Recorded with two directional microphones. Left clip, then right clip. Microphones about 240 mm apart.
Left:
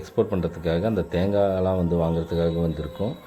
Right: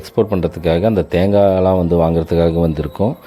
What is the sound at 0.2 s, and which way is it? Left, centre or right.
Speech, right.